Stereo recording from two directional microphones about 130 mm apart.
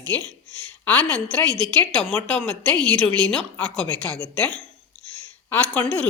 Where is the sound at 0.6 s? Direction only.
10° left (ahead or behind).